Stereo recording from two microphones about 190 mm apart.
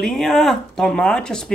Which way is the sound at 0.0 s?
Centre (ahead or behind).